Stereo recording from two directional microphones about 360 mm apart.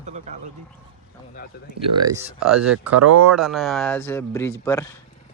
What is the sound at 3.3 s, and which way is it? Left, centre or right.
Speech, centre.